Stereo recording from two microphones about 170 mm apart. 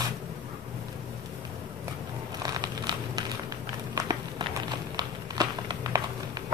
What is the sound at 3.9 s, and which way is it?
Run, 20° right (ahead or behind).